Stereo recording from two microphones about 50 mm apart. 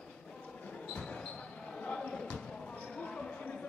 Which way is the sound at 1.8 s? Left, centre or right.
Centre.